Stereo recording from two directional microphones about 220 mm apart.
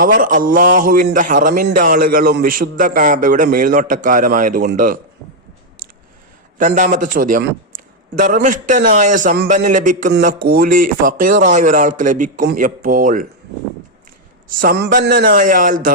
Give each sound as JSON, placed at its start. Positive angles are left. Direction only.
{"t": 0.0, "sound": "a man's voice", "side_deg": -40}
{"t": 6.6, "sound": "a man's voice", "side_deg": -35}
{"t": 14.4, "sound": "a man's voice", "side_deg": -40}